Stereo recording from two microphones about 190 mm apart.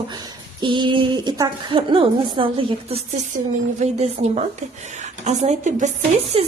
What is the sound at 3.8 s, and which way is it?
Speech, 35° right (ahead or behind).